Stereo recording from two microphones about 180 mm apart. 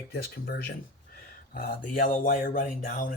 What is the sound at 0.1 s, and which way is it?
Speech, 60° left (ahead or behind).